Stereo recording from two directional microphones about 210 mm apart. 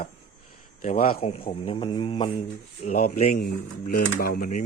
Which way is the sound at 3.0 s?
40° left (ahead or behind).